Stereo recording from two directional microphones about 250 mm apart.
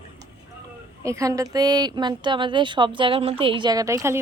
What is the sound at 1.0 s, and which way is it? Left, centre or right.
A woman's voice, centre.